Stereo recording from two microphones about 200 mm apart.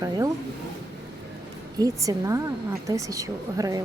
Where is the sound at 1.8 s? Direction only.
15° right (ahead or behind).